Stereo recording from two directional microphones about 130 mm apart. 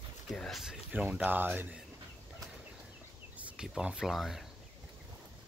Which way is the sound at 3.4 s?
5° right (ahead or behind).